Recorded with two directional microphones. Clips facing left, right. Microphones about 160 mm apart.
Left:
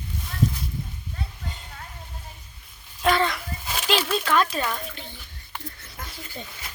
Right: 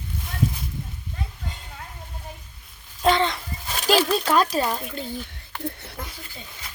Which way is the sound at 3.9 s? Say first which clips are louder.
Right 4 dB; 40° right (ahead or behind).